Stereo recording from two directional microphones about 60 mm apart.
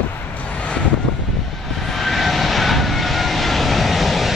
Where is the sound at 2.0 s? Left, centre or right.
Centre.